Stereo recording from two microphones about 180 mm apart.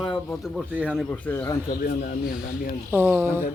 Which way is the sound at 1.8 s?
55° left (ahead or behind).